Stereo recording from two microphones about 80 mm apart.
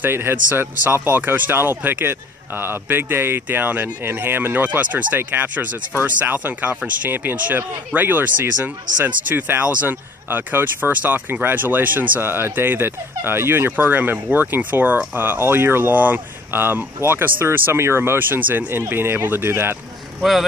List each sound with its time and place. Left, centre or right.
0.0 s speech: right
20.2 s speech: centre